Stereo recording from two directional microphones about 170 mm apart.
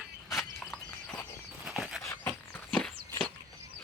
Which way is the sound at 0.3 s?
15° left (ahead or behind).